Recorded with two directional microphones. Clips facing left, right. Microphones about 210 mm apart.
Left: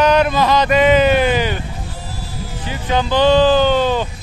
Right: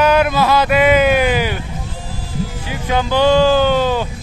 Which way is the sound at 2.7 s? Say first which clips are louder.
Left 1 dB; 10° right (ahead or behind).